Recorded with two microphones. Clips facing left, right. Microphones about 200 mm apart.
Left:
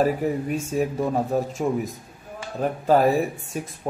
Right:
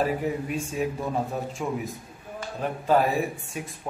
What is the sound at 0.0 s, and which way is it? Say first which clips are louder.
Speech: left 4 dB; 40° left (ahead or behind).